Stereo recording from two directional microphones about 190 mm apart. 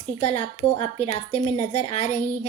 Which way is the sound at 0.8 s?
35° left (ahead or behind).